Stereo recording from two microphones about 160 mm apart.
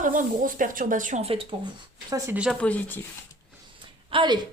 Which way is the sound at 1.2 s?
35° right (ahead or behind).